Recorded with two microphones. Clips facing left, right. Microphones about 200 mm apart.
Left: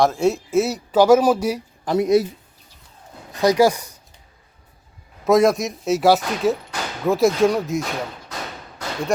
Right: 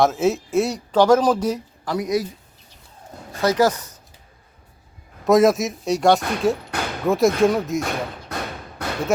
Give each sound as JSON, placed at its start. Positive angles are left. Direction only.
{"t": 0.0, "sound": "speech", "side_deg": 0}
{"t": 1.8, "sound": "speech", "side_deg": 25}
{"t": 3.4, "sound": "speech", "side_deg": 15}
{"t": 5.2, "sound": "speech", "side_deg": 0}
{"t": 7.8, "sound": "speech", "side_deg": -55}
{"t": 8.8, "sound": "a sound", "side_deg": -60}